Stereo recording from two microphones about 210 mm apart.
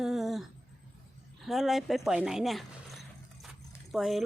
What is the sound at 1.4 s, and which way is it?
Speech, centre (ahead or behind).